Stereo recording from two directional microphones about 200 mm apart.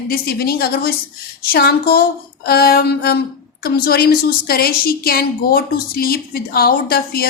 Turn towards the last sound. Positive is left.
turn(degrees=50)  # may be behind; listen again after turning